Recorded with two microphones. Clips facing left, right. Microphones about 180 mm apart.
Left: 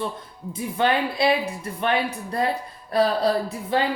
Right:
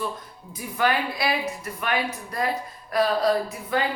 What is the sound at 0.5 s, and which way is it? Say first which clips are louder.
Speech: left 2 dB; 25° left (ahead or behind).